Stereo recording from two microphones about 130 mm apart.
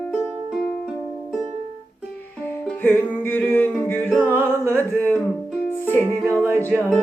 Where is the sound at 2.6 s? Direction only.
10° left (ahead or behind).